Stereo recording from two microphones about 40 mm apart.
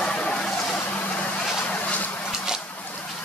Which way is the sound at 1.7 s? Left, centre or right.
Left.